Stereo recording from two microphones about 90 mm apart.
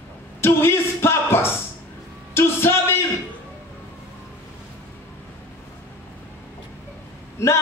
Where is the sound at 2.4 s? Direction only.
25° left (ahead or behind).